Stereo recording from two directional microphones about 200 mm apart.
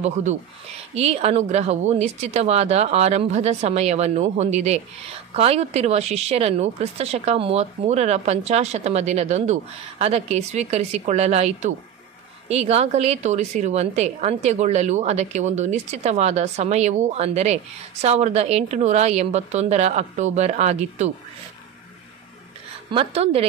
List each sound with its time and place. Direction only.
0.0 s speech: 35° right (ahead or behind)
22.8 s a woman's voice: 30° right (ahead or behind)